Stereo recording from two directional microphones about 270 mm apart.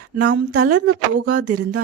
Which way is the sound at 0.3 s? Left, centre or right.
Right.